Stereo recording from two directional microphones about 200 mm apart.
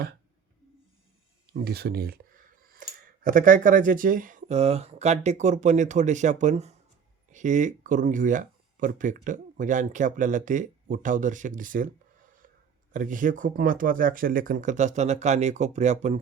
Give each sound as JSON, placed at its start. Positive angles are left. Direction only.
{"t": 1.5, "sound": "speech", "side_deg": -50}